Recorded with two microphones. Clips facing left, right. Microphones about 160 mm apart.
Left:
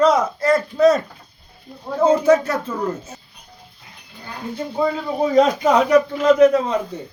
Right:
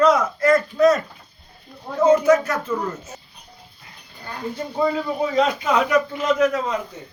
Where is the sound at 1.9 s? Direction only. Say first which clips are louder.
Left 1 dB; 30° left (ahead or behind).